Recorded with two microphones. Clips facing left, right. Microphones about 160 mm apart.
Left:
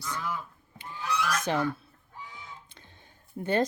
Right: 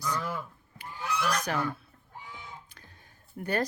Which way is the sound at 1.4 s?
25° left (ahead or behind).